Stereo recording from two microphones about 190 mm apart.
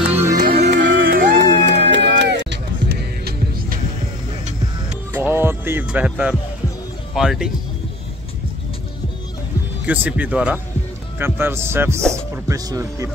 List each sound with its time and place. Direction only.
0.4 s music: 55° right (ahead or behind)
1.0 s music: 50° right (ahead or behind)
1.7 s music: 65° right (ahead or behind); by 3.8 s 50° right (ahead or behind)
5.1 s music: 10° right (ahead or behind)
7.2 s speech: 5° right (ahead or behind)
9.8 s speech: 5° right (ahead or behind)